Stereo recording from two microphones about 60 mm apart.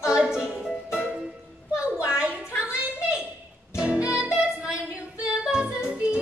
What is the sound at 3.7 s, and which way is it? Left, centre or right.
Music, centre.